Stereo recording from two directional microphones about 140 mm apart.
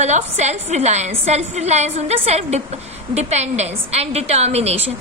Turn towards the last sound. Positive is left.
turn(degrees=-50)  # may be behind; listen again after turning